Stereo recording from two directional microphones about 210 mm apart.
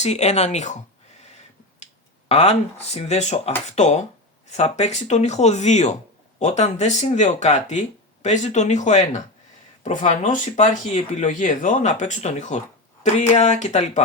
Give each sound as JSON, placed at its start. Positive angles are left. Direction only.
{"t": 0.0, "sound": "speech", "side_deg": 30}
{"t": 2.3, "sound": "speech", "side_deg": 30}